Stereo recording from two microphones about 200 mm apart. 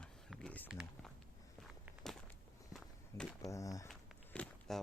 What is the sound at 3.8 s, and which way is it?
Walk, 5° left (ahead or behind).